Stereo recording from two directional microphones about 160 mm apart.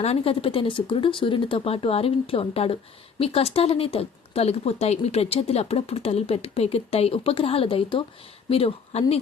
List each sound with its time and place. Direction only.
0.0 s speech: 40° left (ahead or behind)